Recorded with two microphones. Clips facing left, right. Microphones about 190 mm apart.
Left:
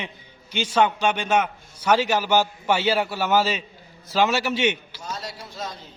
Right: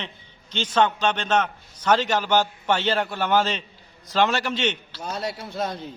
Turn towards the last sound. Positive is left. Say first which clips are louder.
# right 6 dB
turn(degrees=-60)  # may be behind; listen again after turning